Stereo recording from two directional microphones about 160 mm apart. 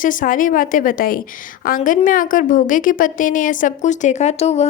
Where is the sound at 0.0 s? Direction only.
55° left (ahead or behind).